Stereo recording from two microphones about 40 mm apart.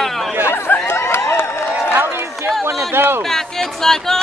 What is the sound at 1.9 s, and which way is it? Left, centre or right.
Run, right.